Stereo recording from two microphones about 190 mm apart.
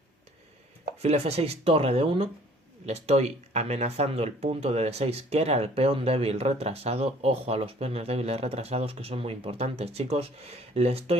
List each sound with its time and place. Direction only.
1.0 s speech: 35° right (ahead or behind)